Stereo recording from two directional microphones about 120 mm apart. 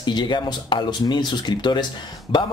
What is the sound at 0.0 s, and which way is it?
Speech, 40° left (ahead or behind).